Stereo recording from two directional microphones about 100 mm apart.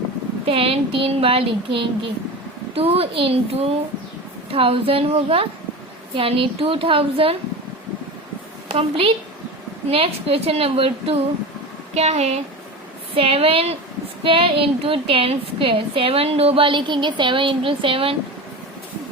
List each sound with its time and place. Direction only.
0.4 s a woman's voice: 65° right (ahead or behind)
2.7 s a child's voice: 80° right
4.5 s a woman's voice: 65° right (ahead or behind)
8.7 s a woman's voice: 60° right (ahead or behind)
9.9 s a woman's voice: 75° right (ahead or behind)
11.9 s a woman's voice: 90° right
13.1 s a woman's voice: 65° right (ahead or behind)
14.3 s a woman's voice: 65° right (ahead or behind)